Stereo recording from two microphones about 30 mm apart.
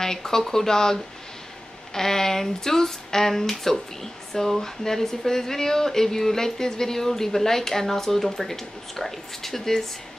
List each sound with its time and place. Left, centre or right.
0.0 s speech: centre